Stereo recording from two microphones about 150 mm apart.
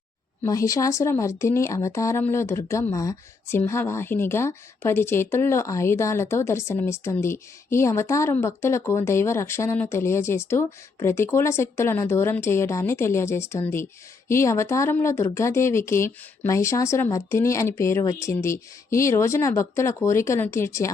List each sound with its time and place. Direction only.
0.4 s a woman's voice: 20° left (ahead or behind)